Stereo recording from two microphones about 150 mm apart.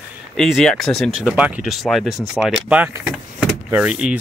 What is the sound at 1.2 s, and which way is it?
Speech, 10° right (ahead or behind).